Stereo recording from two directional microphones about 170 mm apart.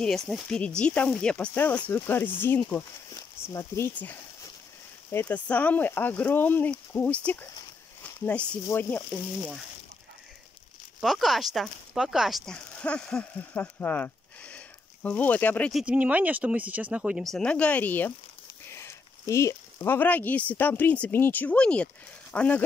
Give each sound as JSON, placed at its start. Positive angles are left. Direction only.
{"t": 0.0, "sound": "speech", "side_deg": 5}
{"t": 8.6, "sound": "speech", "side_deg": 10}
{"t": 11.0, "sound": "speech", "side_deg": 0}
{"t": 15.8, "sound": "speech", "side_deg": -10}